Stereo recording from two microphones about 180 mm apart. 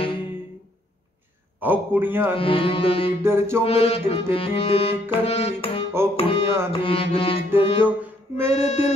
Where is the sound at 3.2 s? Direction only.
15° right (ahead or behind).